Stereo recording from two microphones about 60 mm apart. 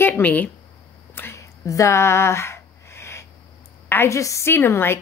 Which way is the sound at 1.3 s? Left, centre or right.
Left.